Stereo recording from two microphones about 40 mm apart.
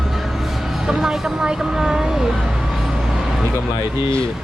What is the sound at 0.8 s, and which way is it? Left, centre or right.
Speech, centre.